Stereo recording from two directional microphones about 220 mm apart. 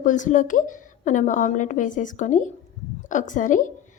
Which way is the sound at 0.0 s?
35° left (ahead or behind).